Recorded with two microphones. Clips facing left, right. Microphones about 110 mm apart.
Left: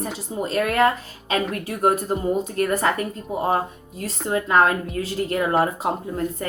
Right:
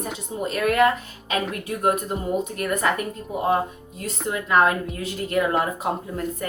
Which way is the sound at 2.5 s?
35° left (ahead or behind).